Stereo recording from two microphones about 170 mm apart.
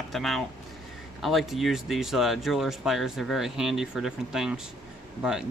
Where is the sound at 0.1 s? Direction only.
Centre (ahead or behind).